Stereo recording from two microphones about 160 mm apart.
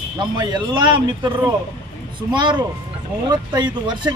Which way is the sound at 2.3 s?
30° right (ahead or behind).